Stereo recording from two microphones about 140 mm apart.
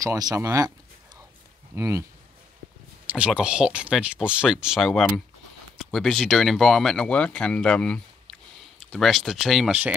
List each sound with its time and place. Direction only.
0.0 s speech: 25° right (ahead or behind)
1.8 s speech: 20° right (ahead or behind)
3.1 s speech: 10° right (ahead or behind)